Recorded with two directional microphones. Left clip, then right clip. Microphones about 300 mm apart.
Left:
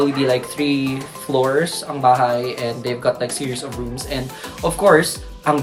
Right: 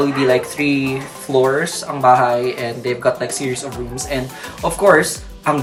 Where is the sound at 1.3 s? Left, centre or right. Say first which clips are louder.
Right 3 dB; centre.